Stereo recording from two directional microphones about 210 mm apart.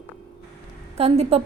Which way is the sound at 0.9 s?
30° right (ahead or behind).